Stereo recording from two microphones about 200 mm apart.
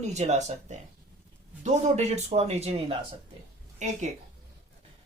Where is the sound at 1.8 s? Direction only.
35° right (ahead or behind).